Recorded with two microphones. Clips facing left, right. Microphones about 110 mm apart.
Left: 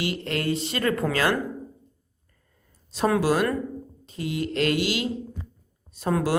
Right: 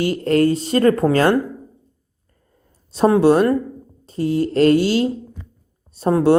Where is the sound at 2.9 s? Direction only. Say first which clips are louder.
Right 9 dB; 30° right (ahead or behind).